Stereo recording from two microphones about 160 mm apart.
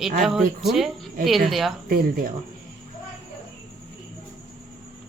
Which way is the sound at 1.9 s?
65° right (ahead or behind).